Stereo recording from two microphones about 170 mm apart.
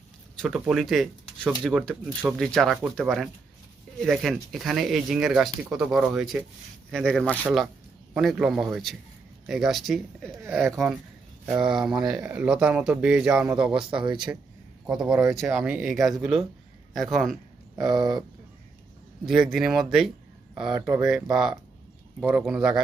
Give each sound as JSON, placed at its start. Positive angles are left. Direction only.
{"t": 0.3, "sound": "speech", "side_deg": 0}
{"t": 13.7, "sound": "speech", "side_deg": -30}
{"t": 14.8, "sound": "speech", "side_deg": -5}
{"t": 17.7, "sound": "speech", "side_deg": -25}
{"t": 19.2, "sound": "speech", "side_deg": 0}